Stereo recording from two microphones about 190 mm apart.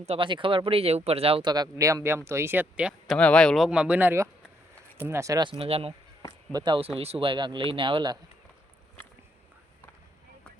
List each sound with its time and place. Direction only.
0.0 s speech: 30° right (ahead or behind); by 3.2 s 5° right (ahead or behind)
3.2 s speech: 5° left (ahead or behind); by 8.2 s 25° right (ahead or behind)